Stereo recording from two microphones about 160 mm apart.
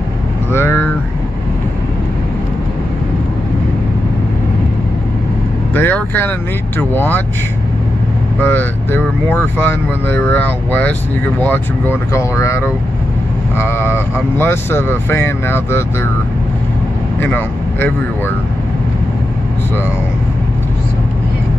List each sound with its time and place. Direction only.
0.5 s speech: 15° left (ahead or behind)
5.8 s speech: 10° left (ahead or behind)
8.4 s speech: 10° left (ahead or behind)
17.2 s speech: 10° left (ahead or behind)